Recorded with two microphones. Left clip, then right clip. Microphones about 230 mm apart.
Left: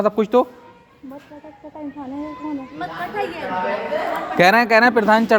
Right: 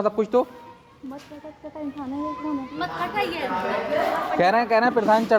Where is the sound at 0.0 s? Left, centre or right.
Left.